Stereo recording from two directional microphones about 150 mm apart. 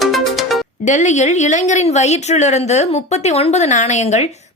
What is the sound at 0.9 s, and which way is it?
Speech, 55° left (ahead or behind).